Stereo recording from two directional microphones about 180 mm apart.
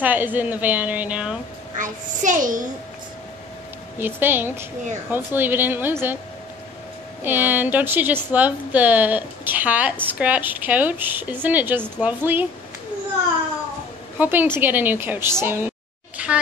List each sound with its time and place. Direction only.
0.0 s a woman's voice: 10° right (ahead or behind)
1.8 s a child's voice: 45° right (ahead or behind)
4.0 s a woman's voice: 10° right (ahead or behind)
7.2 s a woman's voice: 10° right (ahead or behind)
14.1 s a woman's voice: 10° right (ahead or behind)